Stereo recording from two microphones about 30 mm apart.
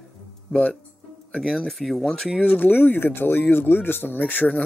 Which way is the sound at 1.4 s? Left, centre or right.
Left.